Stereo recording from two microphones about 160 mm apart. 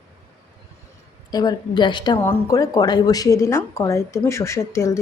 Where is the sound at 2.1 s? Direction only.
20° left (ahead or behind).